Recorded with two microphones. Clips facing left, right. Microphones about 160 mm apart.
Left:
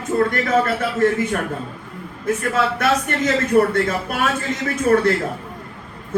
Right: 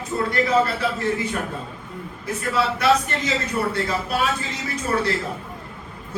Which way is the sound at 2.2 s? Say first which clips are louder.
Left 4 dB; 55° left (ahead or behind).